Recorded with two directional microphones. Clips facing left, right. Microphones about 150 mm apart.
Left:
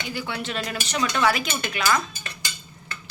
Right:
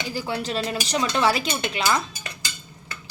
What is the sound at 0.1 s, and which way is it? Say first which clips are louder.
A woman's voice: right 3 dB; 35° right (ahead or behind).